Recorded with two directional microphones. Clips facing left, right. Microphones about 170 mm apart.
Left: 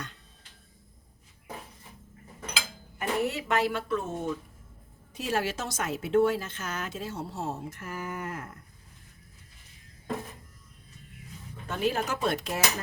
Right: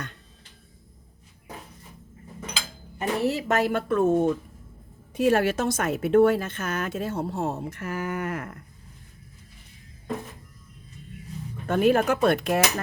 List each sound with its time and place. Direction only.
3.0 s a woman's voice: 35° right (ahead or behind)
3.7 s speech: 50° right (ahead or behind); by 8.5 s 75° right (ahead or behind)
11.7 s speech: 55° right (ahead or behind)